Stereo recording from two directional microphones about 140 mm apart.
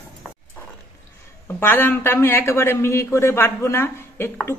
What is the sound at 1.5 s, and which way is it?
A man's voice, 15° left (ahead or behind).